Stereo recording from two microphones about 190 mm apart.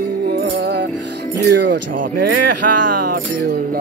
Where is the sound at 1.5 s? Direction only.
55° right (ahead or behind).